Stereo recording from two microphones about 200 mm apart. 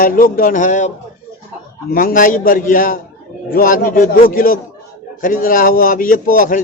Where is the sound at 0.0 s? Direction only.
45° left (ahead or behind).